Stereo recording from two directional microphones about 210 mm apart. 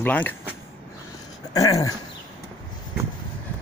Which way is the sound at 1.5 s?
15° left (ahead or behind).